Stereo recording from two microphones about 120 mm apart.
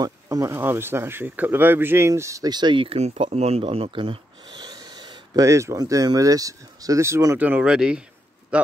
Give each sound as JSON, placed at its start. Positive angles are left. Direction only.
{"t": 0.0, "sound": "speech", "side_deg": -30}
{"t": 3.3, "sound": "speech", "side_deg": -60}
{"t": 7.3, "sound": "speech", "side_deg": -10}